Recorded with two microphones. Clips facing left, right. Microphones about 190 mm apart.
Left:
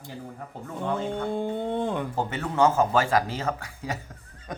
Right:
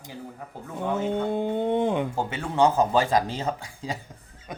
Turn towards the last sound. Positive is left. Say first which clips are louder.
# even
turn(degrees=-15)  # may be behind; listen again after turning